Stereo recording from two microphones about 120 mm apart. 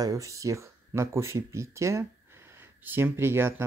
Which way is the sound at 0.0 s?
25° right (ahead or behind).